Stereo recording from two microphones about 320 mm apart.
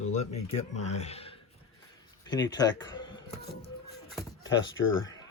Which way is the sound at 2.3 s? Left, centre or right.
Centre.